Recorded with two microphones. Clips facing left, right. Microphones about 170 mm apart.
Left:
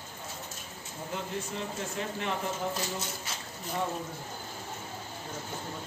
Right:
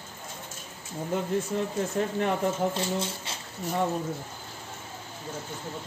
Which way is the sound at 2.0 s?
50° right (ahead or behind).